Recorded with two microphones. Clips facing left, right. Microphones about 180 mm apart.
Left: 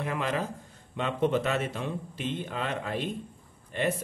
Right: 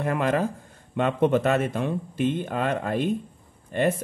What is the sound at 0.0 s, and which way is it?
Speech, 50° right (ahead or behind).